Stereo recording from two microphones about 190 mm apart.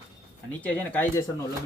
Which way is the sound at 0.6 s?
10° left (ahead or behind).